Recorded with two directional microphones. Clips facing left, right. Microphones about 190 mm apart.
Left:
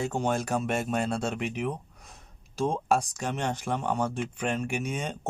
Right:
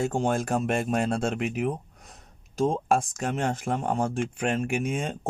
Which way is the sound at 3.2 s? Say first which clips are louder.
Right 3 dB; 50° right (ahead or behind).